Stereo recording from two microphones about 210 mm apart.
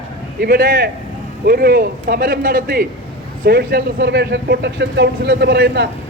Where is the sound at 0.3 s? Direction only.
45° right (ahead or behind).